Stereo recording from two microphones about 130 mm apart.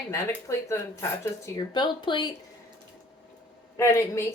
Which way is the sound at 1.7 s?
35° left (ahead or behind).